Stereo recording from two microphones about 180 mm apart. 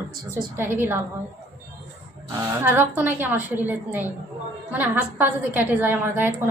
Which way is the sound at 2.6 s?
10° right (ahead or behind).